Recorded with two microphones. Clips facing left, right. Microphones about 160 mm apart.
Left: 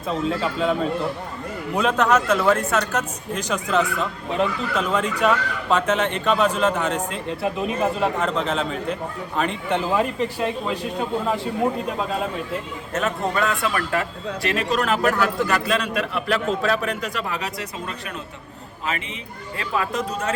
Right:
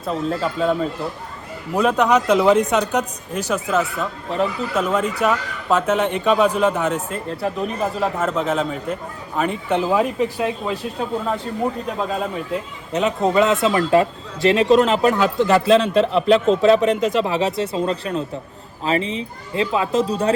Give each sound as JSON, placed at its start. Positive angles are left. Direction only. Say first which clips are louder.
{"t": 0.0, "sound": "speech", "louder": "right 1 dB", "side_deg": 0}
{"t": 7.1, "sound": "speech", "louder": "right 1 dB", "side_deg": 0}
{"t": 12.9, "sound": "a man's voice", "louder": "right 6 dB", "side_deg": -20}